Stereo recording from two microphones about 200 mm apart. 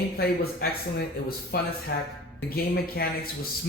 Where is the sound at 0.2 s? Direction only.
50° left (ahead or behind).